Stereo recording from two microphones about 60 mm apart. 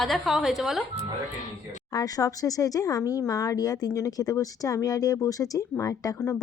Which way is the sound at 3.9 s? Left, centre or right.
Left.